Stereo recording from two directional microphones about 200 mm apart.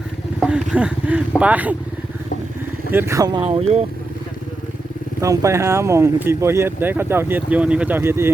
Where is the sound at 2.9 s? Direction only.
10° right (ahead or behind); by 3.8 s 30° right (ahead or behind).